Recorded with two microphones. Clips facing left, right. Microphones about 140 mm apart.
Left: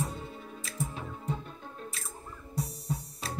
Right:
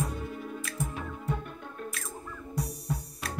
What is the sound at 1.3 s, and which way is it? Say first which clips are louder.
Music: right 2 dB; 60° right (ahead or behind).